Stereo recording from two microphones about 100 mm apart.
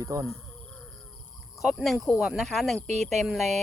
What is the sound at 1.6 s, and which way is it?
Speech, 5° right (ahead or behind).